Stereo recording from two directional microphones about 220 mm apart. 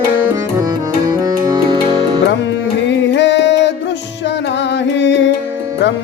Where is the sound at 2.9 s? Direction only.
55° left (ahead or behind).